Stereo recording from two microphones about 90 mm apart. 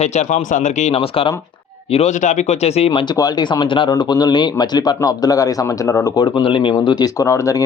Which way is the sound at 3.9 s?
50° left (ahead or behind).